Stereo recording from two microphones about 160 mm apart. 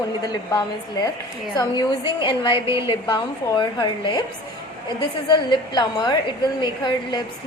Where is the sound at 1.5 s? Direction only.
30° left (ahead or behind).